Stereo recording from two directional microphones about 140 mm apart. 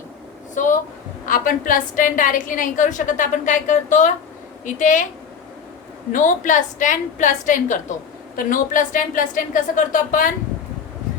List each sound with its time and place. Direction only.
0.5 s a sound: 65° left (ahead or behind)
1.2 s a woman's voice: 75° left (ahead or behind)
6.1 s a woman's voice: 65° left (ahead or behind)